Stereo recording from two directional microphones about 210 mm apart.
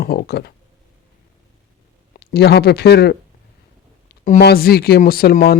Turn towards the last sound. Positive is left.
turn(degrees=45)  # may be behind; listen again after turning